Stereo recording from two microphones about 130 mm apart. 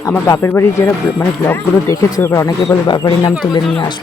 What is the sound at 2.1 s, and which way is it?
Speech, 25° left (ahead or behind).